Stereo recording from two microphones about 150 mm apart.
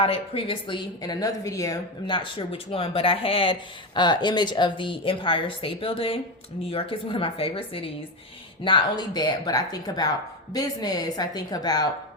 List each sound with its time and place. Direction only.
0.0 s a woman's voice: 40° left (ahead or behind)